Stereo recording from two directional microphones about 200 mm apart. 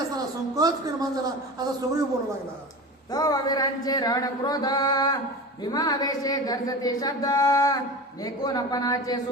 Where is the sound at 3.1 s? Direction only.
20° left (ahead or behind).